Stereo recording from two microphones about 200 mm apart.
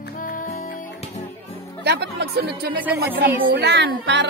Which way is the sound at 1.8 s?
55° right (ahead or behind).